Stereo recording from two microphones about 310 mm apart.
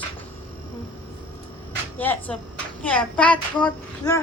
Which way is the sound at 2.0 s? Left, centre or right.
Centre.